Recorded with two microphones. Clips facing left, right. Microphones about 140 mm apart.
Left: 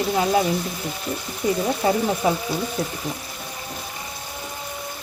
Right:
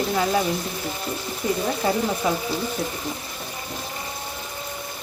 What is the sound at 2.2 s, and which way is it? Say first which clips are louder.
Speech: left 3 dB; 20° left (ahead or behind).